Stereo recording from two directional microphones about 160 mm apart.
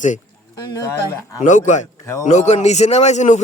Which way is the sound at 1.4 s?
50° left (ahead or behind).